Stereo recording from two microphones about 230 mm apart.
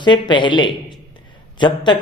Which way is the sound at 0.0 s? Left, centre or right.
Centre.